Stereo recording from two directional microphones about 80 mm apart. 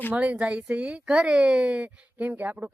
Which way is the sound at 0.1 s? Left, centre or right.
Centre.